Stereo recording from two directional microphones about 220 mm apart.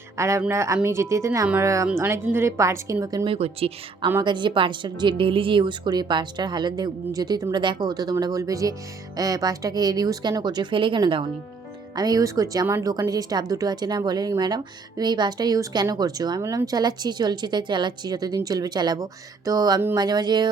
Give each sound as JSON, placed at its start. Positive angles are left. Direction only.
{"t": 0.2, "sound": "speech", "side_deg": -15}
{"t": 3.3, "sound": "a woman's voice", "side_deg": -25}